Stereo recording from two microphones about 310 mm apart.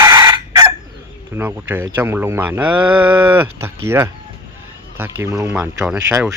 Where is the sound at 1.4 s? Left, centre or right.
Centre.